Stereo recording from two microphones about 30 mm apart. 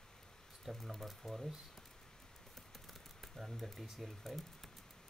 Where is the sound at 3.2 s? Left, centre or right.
Centre.